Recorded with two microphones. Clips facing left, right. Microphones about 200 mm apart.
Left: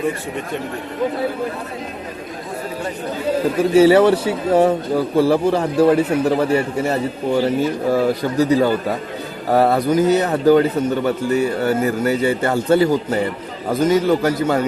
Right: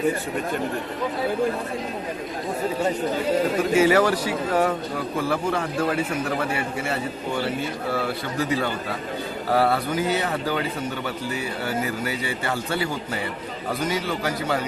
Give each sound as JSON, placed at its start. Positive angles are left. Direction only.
{"t": 3.8, "sound": "a man's voice", "side_deg": 30}